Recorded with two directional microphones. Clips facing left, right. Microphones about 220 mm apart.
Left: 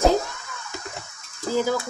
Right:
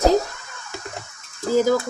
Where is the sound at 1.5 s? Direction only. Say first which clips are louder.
Right 5 dB; 45° right (ahead or behind).